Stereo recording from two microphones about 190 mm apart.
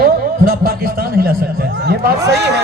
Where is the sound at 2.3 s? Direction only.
60° right (ahead or behind).